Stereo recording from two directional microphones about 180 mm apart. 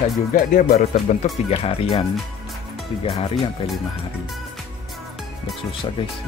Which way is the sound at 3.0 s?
30° left (ahead or behind).